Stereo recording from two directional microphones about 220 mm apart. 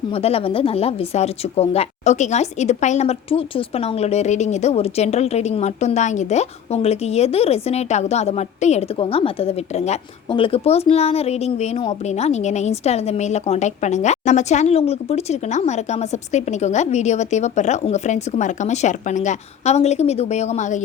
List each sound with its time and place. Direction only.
0.1 s speech: 25° left (ahead or behind)